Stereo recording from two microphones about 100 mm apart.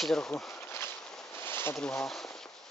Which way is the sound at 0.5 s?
25° left (ahead or behind).